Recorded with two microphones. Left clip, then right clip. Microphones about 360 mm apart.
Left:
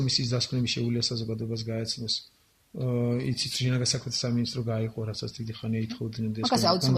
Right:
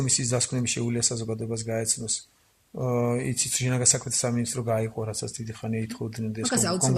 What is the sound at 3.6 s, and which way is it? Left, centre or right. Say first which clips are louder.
Speech: right 3 dB; centre.